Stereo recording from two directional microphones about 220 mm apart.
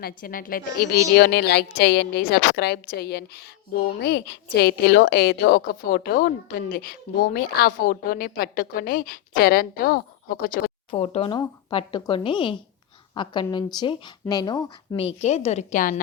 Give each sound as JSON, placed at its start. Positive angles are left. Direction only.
{"t": 0.0, "sound": "a woman's voice", "side_deg": 40}
{"t": 10.9, "sound": "speech", "side_deg": 30}